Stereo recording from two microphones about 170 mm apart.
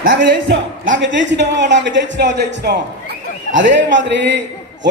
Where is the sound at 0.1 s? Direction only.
85° right.